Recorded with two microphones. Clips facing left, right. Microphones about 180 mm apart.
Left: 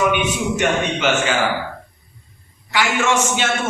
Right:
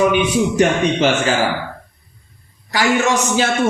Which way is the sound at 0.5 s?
35° right (ahead or behind).